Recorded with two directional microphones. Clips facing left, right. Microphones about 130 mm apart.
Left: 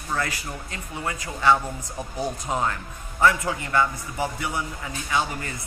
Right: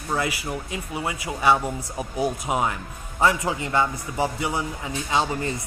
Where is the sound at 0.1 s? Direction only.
15° right (ahead or behind).